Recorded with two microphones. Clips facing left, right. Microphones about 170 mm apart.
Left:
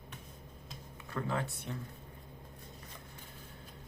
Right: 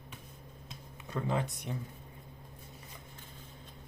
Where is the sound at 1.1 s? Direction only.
20° right (ahead or behind).